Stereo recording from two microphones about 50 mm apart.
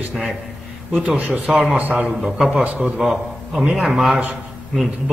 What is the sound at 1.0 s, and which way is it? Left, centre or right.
A man's voice, right.